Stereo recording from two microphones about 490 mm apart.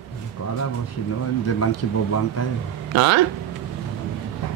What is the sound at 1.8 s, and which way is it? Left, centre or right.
Speech, left.